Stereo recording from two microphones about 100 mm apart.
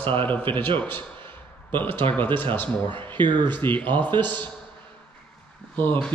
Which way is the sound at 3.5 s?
20° left (ahead or behind).